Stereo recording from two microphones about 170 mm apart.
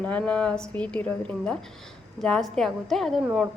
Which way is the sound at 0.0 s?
5° left (ahead or behind).